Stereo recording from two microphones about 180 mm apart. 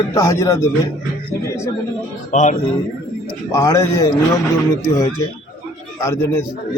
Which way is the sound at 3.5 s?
15° left (ahead or behind).